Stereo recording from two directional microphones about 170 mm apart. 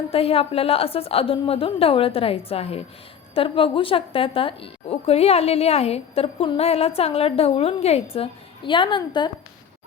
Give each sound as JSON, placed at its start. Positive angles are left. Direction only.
{"t": 0.1, "sound": "a woman's voice", "side_deg": 35}